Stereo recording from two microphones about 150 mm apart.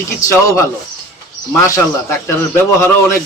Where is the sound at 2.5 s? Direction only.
20° left (ahead or behind).